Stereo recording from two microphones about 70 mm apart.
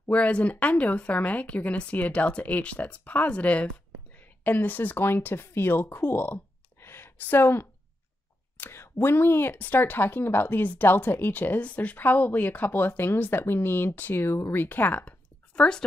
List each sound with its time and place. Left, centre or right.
0.0 s speech: centre
8.5 s a sound: left
9.0 s speech: left
15.5 s speech: centre